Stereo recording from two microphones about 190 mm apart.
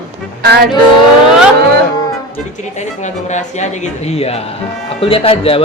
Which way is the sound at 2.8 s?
40° left (ahead or behind).